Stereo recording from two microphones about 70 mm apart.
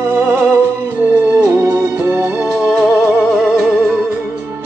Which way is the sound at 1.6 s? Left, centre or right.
Right.